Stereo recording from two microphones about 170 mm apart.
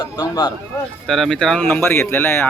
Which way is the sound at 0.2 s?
25° left (ahead or behind).